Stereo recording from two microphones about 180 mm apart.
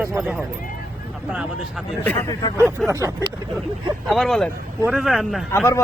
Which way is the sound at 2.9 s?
20° right (ahead or behind).